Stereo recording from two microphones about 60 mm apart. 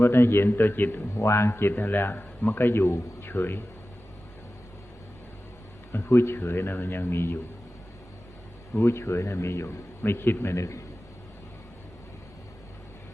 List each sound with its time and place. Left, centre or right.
0.0 s a man's voice: left
1.1 s a man's voice: left
1.7 s a man's voice: left
2.8 s a man's voice: left
3.2 s speech: left
5.9 s a man's voice: left
8.8 s a man's voice: left
10.0 s a man's voice: left
10.5 s a man's voice: left